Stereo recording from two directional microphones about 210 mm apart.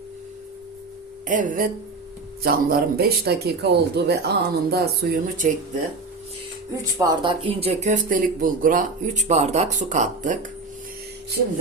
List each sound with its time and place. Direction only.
1.3 s speech: 40° right (ahead or behind)
7.1 s speech: 25° right (ahead or behind)